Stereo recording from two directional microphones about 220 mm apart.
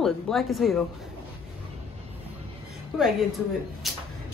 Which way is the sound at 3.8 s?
Centre (ahead or behind).